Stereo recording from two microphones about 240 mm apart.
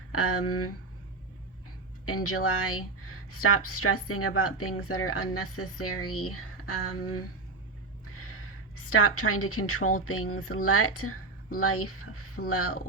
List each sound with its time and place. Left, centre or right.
0.1 s speech: left
2.0 s speech: left
8.2 s a woman's voice: left